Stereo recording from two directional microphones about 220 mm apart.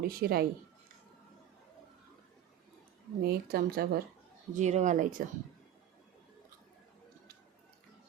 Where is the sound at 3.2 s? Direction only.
45° right (ahead or behind).